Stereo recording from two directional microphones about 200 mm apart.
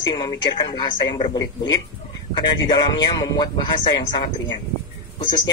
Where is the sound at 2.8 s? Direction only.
20° left (ahead or behind).